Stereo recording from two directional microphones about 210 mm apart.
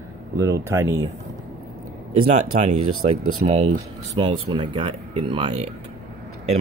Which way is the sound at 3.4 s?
30° right (ahead or behind).